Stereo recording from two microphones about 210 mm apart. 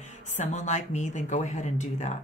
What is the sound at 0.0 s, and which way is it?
Speech, 35° left (ahead or behind).